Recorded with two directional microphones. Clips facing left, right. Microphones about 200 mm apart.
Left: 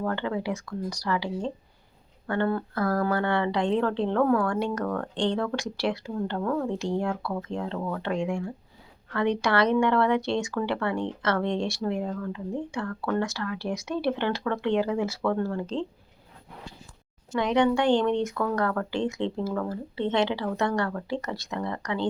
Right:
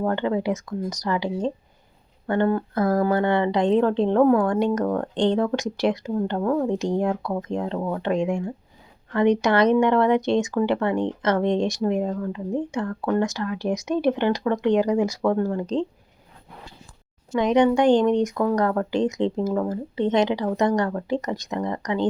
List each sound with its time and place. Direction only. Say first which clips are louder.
0.0 s speech: right 6 dB; 20° right (ahead or behind)
17.3 s speech: right 5 dB; 15° right (ahead or behind)